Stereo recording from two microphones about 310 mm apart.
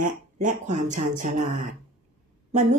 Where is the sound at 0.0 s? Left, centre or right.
Right.